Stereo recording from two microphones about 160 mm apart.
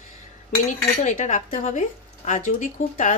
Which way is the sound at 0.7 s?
50° left (ahead or behind).